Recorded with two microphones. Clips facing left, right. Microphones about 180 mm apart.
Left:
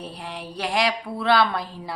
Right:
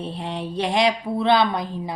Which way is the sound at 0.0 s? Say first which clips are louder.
Right 6 dB; 25° right (ahead or behind).